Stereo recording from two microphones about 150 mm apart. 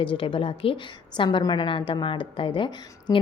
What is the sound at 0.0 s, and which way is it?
A woman's voice, 35° left (ahead or behind).